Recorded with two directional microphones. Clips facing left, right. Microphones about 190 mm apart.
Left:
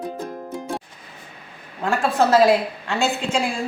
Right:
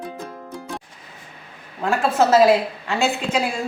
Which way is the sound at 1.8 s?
5° right (ahead or behind).